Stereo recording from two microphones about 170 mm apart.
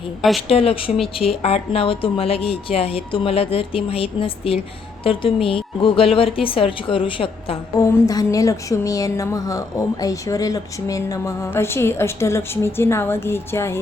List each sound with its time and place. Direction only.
0.2 s speech: centre (ahead or behind)
0.4 s a woman's voice: 35° left (ahead or behind)
7.8 s speech: 20° left (ahead or behind)